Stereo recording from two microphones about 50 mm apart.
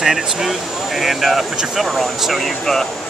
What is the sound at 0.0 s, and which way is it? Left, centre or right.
Speech, centre.